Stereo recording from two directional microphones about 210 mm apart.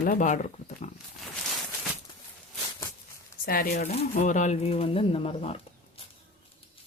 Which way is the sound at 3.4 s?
45° left (ahead or behind).